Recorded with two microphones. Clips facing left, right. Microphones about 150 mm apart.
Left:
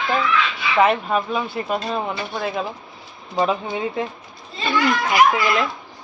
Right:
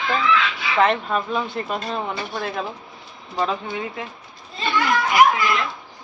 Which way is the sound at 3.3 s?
15° left (ahead or behind).